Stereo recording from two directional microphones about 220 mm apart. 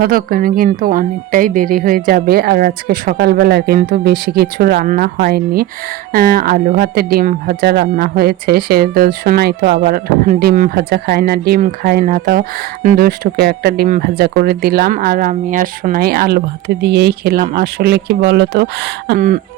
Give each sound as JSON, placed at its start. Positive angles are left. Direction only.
{"t": 0.0, "sound": "speech", "side_deg": -40}